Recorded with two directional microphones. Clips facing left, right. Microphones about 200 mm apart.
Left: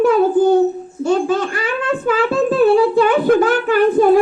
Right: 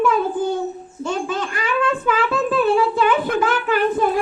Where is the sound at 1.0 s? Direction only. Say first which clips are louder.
Left 8 dB; 40° left (ahead or behind).